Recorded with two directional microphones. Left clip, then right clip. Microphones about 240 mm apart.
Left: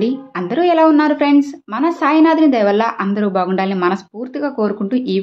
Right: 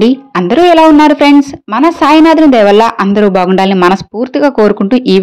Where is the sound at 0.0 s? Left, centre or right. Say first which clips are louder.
Right 10 dB; right.